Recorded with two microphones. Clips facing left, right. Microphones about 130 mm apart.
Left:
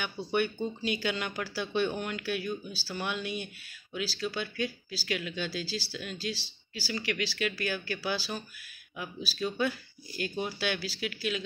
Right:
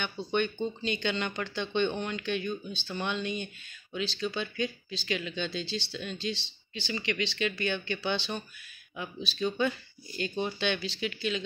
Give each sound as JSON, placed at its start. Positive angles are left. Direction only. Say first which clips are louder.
{"t": 0.0, "sound": "speech", "louder": "even", "side_deg": 5}